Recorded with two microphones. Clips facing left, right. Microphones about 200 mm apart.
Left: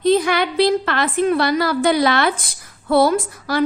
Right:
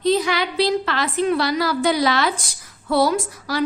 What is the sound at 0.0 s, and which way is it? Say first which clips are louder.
A woman's voice: left 3 dB; 55° left (ahead or behind).